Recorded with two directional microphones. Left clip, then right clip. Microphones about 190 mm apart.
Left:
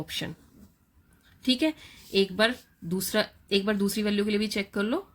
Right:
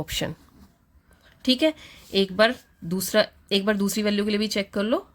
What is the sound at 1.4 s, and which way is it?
Speech, 30° right (ahead or behind).